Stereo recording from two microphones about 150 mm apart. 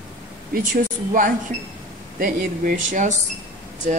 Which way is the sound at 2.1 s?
70° right (ahead or behind).